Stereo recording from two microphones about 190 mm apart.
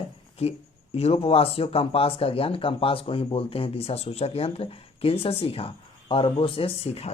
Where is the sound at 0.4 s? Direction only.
30° left (ahead or behind).